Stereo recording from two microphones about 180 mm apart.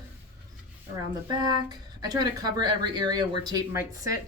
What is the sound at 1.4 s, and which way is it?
Speech, 25° right (ahead or behind).